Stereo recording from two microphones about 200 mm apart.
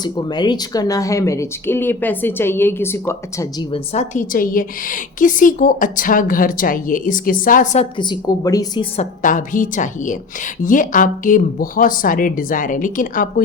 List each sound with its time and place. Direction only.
0.0 s speech: 20° left (ahead or behind)
3.7 s a woman's voice: 35° left (ahead or behind)
7.9 s a woman's voice: 20° left (ahead or behind)
9.0 s a woman's voice: 40° left (ahead or behind)